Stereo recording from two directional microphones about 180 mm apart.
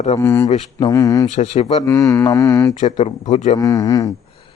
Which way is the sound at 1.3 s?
40° left (ahead or behind).